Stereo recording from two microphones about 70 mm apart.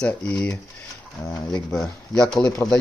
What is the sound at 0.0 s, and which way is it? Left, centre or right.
Speech, centre.